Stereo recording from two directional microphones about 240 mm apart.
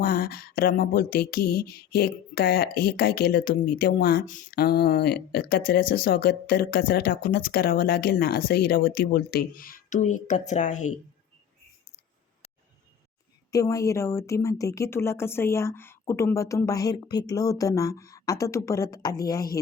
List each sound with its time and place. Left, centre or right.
0.0 s speech: left
13.5 s speech: centre